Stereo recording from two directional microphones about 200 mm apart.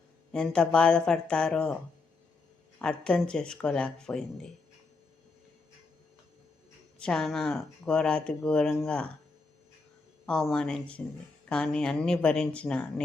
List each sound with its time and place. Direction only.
0.3 s speech: 5° left (ahead or behind)
2.7 s speech: 5° left (ahead or behind)
7.0 s speech: 5° left (ahead or behind)
10.2 s speech: 5° left (ahead or behind)